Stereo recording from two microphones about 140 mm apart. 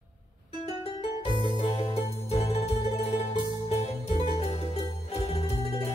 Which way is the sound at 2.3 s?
50° left (ahead or behind).